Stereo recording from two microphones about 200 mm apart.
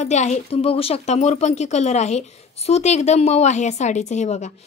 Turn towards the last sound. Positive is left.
turn(degrees=35)  # may be behind; listen again after turning